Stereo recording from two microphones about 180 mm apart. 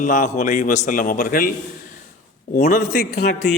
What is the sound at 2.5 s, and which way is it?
Speech, 45° left (ahead or behind).